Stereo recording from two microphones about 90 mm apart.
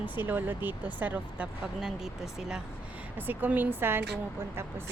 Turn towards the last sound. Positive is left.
turn(degrees=-25)  # may be behind; listen again after turning